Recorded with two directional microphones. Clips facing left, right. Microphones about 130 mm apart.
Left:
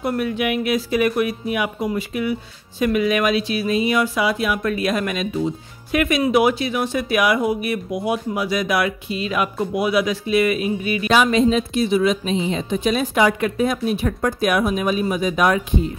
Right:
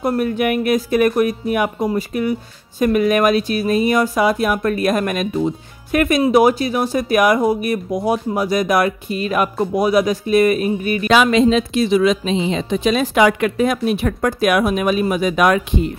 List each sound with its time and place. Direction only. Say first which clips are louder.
0.0 s speech: right 4 dB; 40° right (ahead or behind)
11.1 s a woman's voice: right 3 dB; 90° right